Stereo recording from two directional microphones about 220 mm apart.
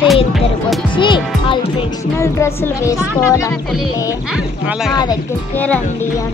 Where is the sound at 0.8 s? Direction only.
20° left (ahead or behind).